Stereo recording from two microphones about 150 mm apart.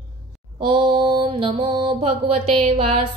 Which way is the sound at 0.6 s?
35° right (ahead or behind).